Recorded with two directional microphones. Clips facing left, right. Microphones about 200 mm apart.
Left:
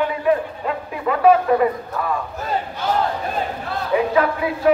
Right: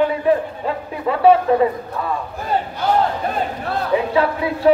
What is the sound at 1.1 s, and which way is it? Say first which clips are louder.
Speech: right 1 dB; 30° right (ahead or behind).